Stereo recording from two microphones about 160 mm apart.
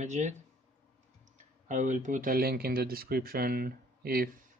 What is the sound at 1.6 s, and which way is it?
Speech, 50° right (ahead or behind).